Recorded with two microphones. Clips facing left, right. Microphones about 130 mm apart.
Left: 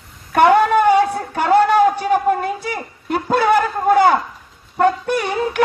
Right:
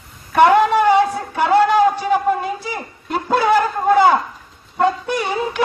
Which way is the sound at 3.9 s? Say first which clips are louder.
Even; 50° left (ahead or behind).